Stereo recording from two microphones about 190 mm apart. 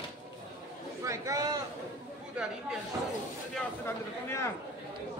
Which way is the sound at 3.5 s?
15° left (ahead or behind).